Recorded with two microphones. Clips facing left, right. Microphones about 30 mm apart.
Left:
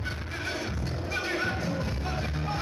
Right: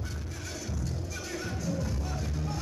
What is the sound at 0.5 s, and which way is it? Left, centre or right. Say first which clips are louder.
Music: left 4 dB; left.